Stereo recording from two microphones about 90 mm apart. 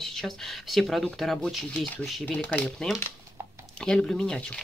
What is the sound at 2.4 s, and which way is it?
Speech, 20° left (ahead or behind).